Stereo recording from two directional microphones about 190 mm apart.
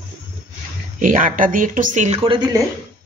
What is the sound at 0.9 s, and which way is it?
Speech, 45° right (ahead or behind).